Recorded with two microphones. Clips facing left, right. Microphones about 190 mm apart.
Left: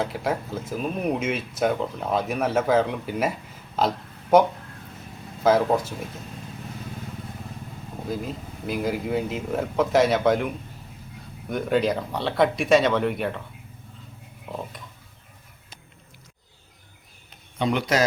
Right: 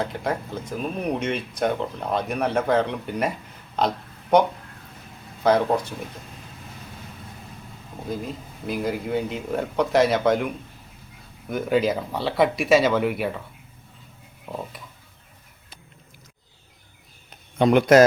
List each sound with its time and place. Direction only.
0.0 s speech: 5° left (ahead or behind)
3.8 s a sound: 5° left (ahead or behind)
5.4 s speech: centre (ahead or behind)
8.0 s speech: centre (ahead or behind)
14.4 s a sound: 5° right (ahead or behind)
17.6 s speech: 55° right (ahead or behind)